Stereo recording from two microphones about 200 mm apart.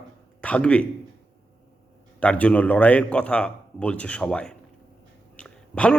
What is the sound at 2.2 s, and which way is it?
A man's voice, 5° left (ahead or behind).